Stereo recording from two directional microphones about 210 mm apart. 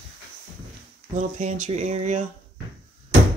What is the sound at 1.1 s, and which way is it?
Speech, 35° right (ahead or behind).